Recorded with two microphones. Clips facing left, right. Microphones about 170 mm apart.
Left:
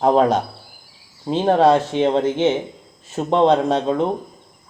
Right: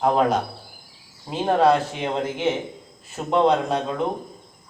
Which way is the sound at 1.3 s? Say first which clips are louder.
Left 4 dB; 25° left (ahead or behind).